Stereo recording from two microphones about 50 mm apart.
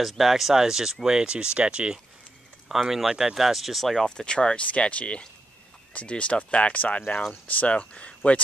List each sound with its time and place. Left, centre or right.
0.2 s speech: centre
2.7 s speech: centre
4.1 s speech: centre